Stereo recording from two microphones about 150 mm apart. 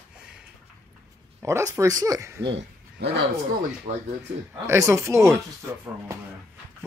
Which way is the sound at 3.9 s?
55° right (ahead or behind).